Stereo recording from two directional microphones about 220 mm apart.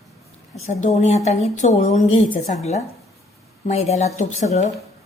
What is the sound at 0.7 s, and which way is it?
Speech, 30° left (ahead or behind).